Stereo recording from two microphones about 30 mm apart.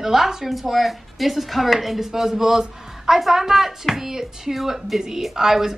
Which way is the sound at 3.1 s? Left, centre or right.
Centre.